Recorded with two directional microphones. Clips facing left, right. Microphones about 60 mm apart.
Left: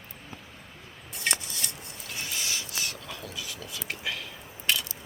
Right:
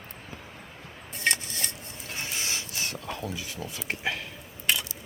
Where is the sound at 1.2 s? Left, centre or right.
Right.